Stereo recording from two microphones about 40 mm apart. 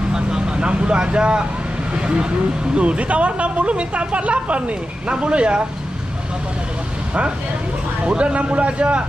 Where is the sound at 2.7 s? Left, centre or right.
Right.